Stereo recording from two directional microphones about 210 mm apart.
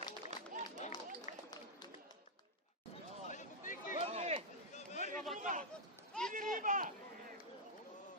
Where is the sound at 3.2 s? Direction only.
35° left (ahead or behind).